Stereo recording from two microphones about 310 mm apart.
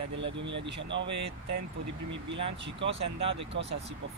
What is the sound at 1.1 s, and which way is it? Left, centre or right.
Speech, right.